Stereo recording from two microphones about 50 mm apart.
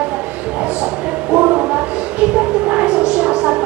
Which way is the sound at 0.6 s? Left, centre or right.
Centre.